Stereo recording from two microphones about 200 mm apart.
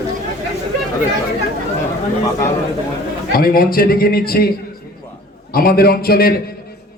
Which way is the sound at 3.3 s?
50° left (ahead or behind).